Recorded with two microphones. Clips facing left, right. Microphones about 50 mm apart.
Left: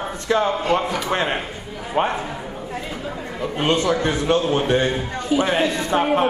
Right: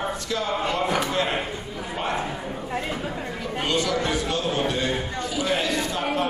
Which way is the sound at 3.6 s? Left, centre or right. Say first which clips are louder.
Left 5 dB; left.